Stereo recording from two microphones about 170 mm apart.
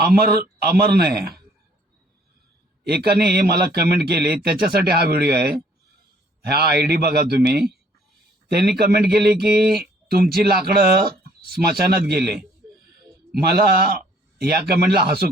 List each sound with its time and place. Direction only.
0.6 s speech: 70° right (ahead or behind)
2.8 s a man's voice: 70° right (ahead or behind)